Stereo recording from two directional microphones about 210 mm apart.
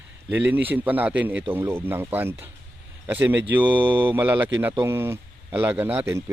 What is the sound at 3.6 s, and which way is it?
Mantra, 25° right (ahead or behind).